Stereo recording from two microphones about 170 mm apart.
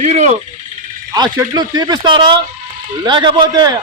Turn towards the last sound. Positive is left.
turn(degrees=-25)  # may be behind; listen again after turning